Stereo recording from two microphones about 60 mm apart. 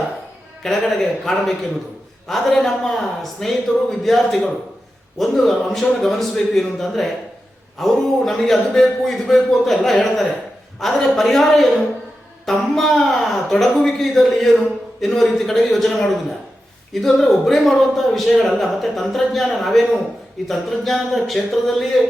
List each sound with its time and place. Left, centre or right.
0.6 s a man's voice: centre